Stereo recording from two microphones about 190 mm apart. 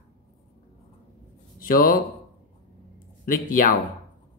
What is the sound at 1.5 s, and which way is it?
Speech, 50° left (ahead or behind).